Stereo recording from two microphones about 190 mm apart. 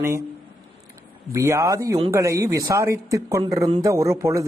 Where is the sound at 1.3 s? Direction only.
15° right (ahead or behind).